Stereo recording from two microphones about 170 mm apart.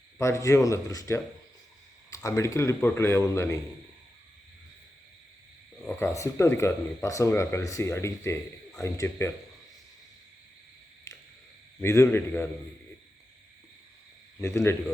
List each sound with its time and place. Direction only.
0.2 s speech: 15° left (ahead or behind)
5.8 s speech: 15° left (ahead or behind)
11.1 s a sound: 20° left (ahead or behind)
11.8 s speech: 15° left (ahead or behind)
14.4 s speech: 15° left (ahead or behind)